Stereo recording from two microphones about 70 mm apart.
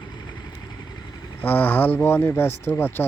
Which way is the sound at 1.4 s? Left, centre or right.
Left.